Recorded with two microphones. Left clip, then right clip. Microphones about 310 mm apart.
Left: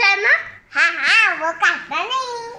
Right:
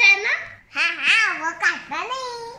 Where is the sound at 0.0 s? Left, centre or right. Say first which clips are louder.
Left 1 dB; centre.